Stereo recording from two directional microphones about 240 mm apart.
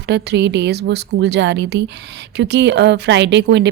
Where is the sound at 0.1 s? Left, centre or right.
Right.